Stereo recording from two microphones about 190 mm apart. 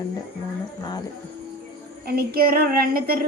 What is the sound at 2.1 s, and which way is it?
Child singing, 55° right (ahead or behind).